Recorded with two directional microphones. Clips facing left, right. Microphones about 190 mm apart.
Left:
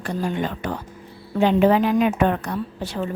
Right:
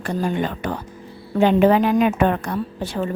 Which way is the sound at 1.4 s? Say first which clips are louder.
Right 2 dB; 55° right (ahead or behind).